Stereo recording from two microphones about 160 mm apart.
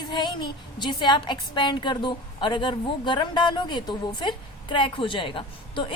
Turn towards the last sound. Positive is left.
turn(degrees=30)  # may be behind; listen again after turning